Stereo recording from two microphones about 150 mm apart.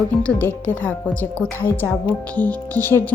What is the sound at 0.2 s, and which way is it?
A woman's voice, 10° left (ahead or behind).